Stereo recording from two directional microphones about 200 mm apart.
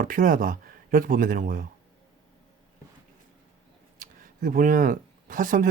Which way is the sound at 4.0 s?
40° right (ahead or behind).